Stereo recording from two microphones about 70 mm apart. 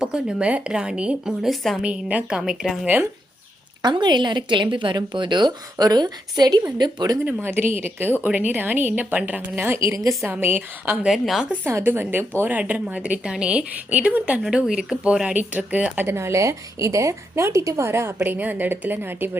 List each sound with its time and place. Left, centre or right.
0.0 s a woman's voice: centre
1.8 s a woman's voice: centre
2.4 s speech: centre
2.8 s a woman's voice: right
3.8 s a woman's voice: right
7.3 s a woman's voice: right
9.6 s a woman's voice: right
10.4 s a woman's voice: right
11.1 s speech: centre
11.6 s a woman's voice: right
14.4 s a woman's voice: centre; by 16.0 s right
16.0 s a woman's voice: right
18.2 s a woman's voice: right